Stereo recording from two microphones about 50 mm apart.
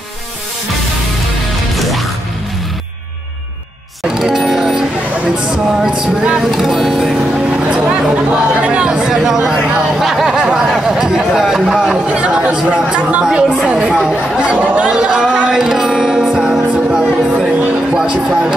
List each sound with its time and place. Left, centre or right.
1.8 s music: centre
4.1 s music: centre
5.9 s speech: centre
7.7 s speech: centre
12.2 s speech: right
14.4 s speech: right
14.8 s a sound: centre
15.5 s music: centre
17.9 s speech: centre